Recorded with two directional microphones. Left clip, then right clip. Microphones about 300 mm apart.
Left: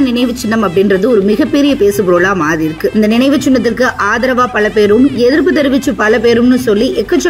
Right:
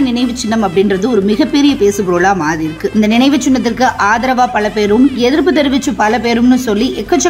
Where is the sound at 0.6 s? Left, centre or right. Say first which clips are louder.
Left 2 dB; centre.